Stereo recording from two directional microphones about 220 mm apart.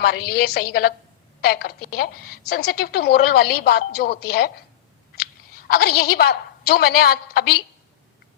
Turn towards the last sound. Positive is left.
turn(degrees=45)  # may be behind; listen again after turning